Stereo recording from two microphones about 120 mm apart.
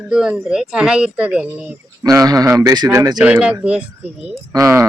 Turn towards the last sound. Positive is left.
turn(degrees=-25)  # may be behind; listen again after turning